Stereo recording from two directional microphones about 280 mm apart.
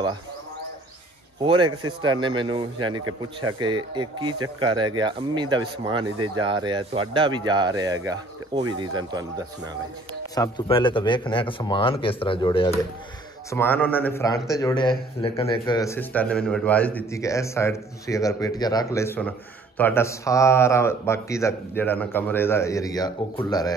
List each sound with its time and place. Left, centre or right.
1.4 s speech: centre
10.3 s speech: centre